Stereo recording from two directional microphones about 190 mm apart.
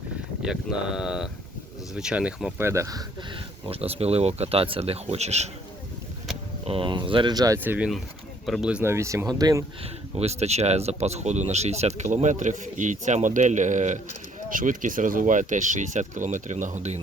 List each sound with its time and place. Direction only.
0.4 s speech: 5° right (ahead or behind)
3.7 s speech: 30° right (ahead or behind)
6.7 s speech: 25° right (ahead or behind)
10.2 s speech: 35° right (ahead or behind)